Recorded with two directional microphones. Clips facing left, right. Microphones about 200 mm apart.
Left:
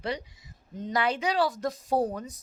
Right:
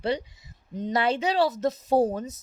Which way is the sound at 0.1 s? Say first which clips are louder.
Right 6 dB; 25° right (ahead or behind).